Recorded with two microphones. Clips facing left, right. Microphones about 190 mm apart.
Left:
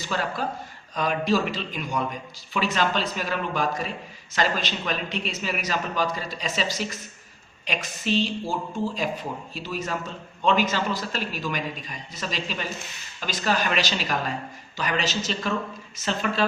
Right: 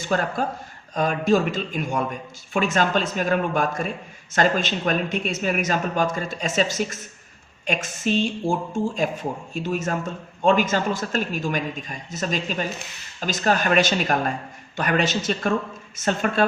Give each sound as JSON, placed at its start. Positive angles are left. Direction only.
{"t": 0.0, "sound": "speech", "side_deg": -50}